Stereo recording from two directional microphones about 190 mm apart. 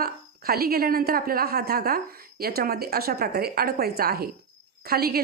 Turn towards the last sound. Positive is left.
turn(degrees=-55)  # may be behind; listen again after turning